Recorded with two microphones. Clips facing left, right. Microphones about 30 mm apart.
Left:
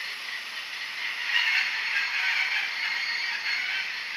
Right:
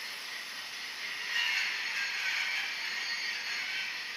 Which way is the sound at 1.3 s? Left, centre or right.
Left.